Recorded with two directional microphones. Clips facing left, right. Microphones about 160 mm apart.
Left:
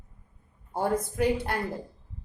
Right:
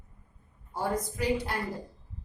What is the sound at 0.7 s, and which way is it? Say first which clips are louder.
Speech: left 4 dB; 55° left (ahead or behind).